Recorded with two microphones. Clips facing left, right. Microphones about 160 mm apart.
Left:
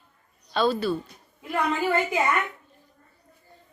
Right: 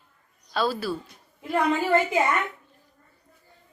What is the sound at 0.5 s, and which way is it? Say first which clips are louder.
Speech: left 3 dB; 5° right (ahead or behind).